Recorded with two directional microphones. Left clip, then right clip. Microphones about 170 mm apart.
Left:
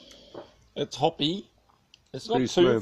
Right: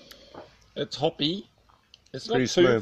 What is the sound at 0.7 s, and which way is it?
Speech, 15° left (ahead or behind).